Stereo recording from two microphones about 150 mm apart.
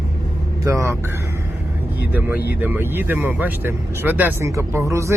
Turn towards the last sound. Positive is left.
turn(degrees=-20)  # may be behind; listen again after turning